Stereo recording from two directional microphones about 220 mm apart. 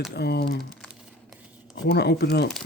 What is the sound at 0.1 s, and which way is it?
Speech, 50° left (ahead or behind).